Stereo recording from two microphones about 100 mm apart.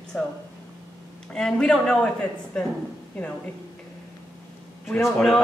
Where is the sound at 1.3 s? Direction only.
5° left (ahead or behind).